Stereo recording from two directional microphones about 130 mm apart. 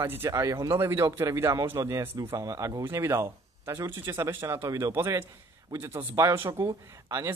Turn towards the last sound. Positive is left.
turn(degrees=-25)  # may be behind; listen again after turning